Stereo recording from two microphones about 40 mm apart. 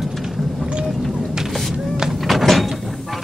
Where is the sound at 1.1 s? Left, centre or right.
Centre.